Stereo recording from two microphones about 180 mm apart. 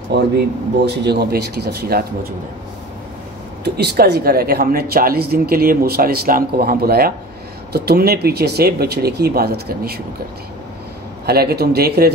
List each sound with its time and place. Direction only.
0.1 s speech: 70° right (ahead or behind)
3.6 s speech: 60° right (ahead or behind)
11.2 s speech: 60° right (ahead or behind)